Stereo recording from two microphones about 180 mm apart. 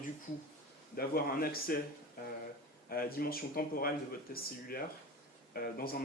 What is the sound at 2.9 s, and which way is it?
Speech, 55° left (ahead or behind).